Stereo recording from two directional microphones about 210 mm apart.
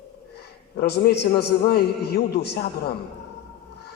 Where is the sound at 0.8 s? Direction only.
50° left (ahead or behind).